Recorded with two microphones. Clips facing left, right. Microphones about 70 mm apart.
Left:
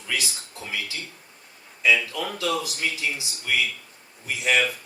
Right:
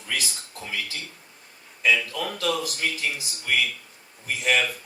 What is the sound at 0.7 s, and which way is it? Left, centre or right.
A man's voice, right.